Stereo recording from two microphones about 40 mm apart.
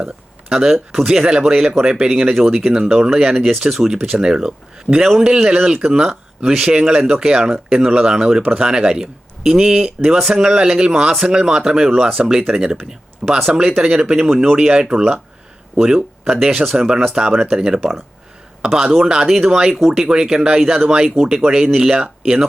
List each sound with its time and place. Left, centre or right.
0.0 s speech: centre
6.4 s speech: centre
14.0 s speech: right
14.3 s speech: centre
14.7 s speech: right
17.7 s speech: centre
18.6 s a man's voice: centre
19.9 s speech: centre